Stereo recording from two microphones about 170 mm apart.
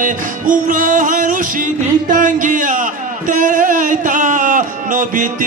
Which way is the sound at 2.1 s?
50° right (ahead or behind).